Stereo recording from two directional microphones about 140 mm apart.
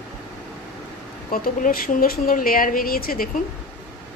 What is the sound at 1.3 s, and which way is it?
Speech, 90° left.